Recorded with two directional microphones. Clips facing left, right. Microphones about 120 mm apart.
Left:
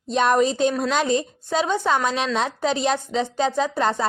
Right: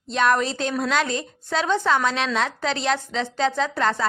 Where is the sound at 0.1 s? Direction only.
20° left (ahead or behind).